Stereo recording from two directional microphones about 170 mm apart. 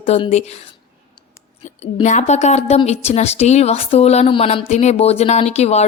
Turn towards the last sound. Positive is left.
turn(degrees=40)  # may be behind; listen again after turning